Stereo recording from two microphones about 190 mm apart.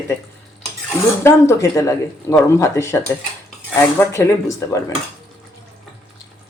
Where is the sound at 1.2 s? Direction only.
15° left (ahead or behind).